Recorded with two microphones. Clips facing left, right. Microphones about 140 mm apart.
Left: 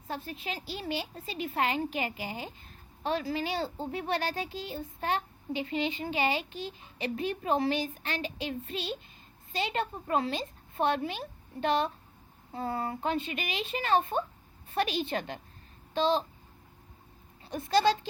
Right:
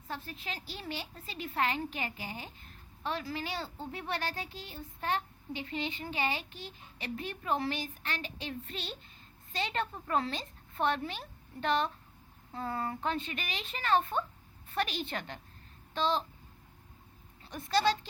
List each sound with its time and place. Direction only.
0.1 s speech: 20° left (ahead or behind)
12.5 s speech: 20° left (ahead or behind)